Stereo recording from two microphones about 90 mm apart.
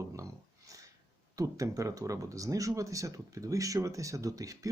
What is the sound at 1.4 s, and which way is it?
Speech, 40° right (ahead or behind).